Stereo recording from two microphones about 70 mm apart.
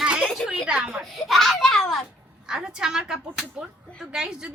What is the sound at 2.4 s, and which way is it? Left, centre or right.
A woman's voice, centre.